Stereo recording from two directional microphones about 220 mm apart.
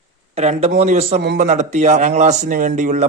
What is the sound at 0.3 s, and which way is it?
A man's voice, 30° right (ahead or behind).